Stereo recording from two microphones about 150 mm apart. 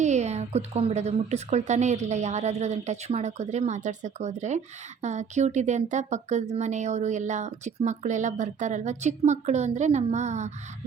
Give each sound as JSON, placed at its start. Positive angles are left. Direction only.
{"t": 0.0, "sound": "a woman's voice", "side_deg": -50}